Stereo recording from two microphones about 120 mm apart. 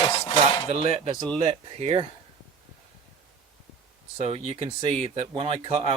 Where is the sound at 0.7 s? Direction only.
60° right (ahead or behind).